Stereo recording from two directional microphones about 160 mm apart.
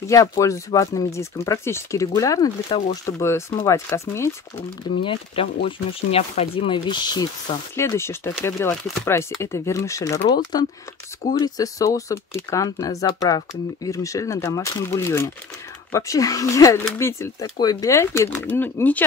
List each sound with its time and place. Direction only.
0.0 s speech: 20° left (ahead or behind)
5.0 s speech: 35° left (ahead or behind); by 19.0 s 10° left (ahead or behind)